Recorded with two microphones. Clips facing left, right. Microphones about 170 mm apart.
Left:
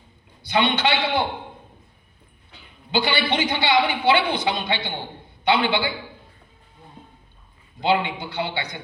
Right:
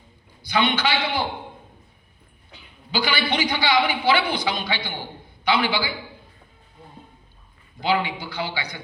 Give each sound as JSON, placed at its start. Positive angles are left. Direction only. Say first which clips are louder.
{"t": 0.5, "sound": "a man's voice", "louder": "left 1 dB", "side_deg": 25}
{"t": 2.9, "sound": "a man's voice", "louder": "left 2 dB", "side_deg": 25}
{"t": 7.8, "sound": "a man's voice", "louder": "left 2 dB", "side_deg": 20}